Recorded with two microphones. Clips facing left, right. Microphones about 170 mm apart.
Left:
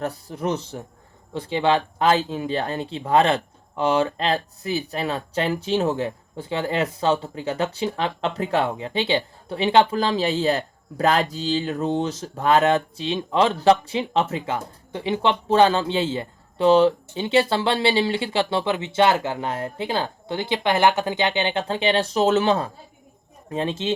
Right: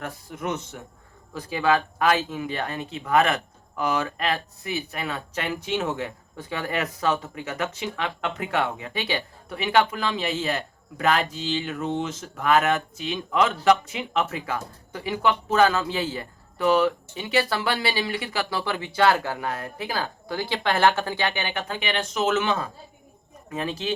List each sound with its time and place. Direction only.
0.0 s speech: 35° left (ahead or behind)